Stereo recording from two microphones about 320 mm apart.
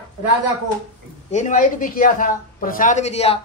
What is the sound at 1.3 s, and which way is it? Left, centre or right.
A man's voice, left.